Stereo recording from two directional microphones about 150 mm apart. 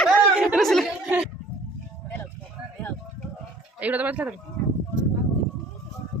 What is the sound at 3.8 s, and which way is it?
Speech, 10° right (ahead or behind).